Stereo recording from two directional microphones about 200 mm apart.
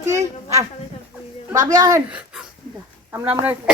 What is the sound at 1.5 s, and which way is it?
Speech, 15° right (ahead or behind).